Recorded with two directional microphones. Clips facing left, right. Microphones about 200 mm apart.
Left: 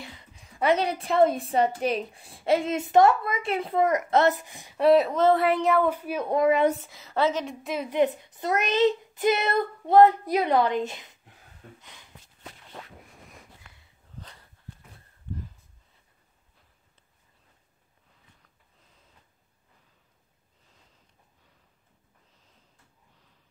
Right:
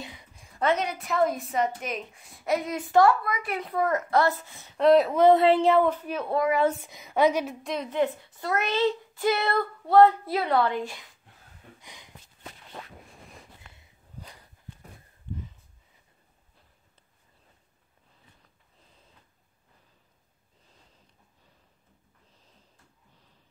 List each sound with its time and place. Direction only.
0.0 s a sound: 15° right (ahead or behind)
0.7 s a woman's voice: 30° left (ahead or behind); by 5.1 s 5° left (ahead or behind)
5.1 s a woman's voice: 15° right (ahead or behind)
5.4 s speech: 30° right (ahead or behind)
5.9 s a woman's voice: 10° left (ahead or behind)
6.8 s a woman's voice: 15° right (ahead or behind)
7.4 s a woman's voice: 5° left (ahead or behind)
7.9 s a woman's voice: 15° left (ahead or behind)
11.8 s a sound: 15° right (ahead or behind)